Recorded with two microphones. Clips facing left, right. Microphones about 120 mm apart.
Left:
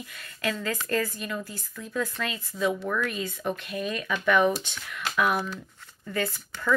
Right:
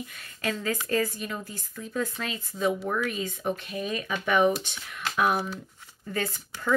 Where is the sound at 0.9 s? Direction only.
45° left (ahead or behind).